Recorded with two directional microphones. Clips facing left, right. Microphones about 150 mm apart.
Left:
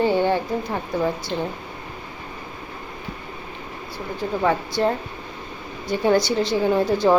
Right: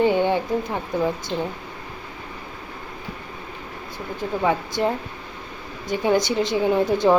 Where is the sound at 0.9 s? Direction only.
Centre (ahead or behind).